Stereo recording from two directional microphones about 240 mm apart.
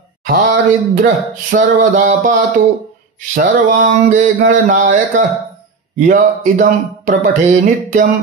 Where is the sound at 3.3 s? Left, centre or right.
Right.